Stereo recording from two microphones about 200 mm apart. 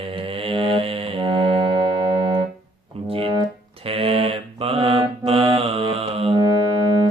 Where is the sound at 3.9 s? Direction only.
30° right (ahead or behind).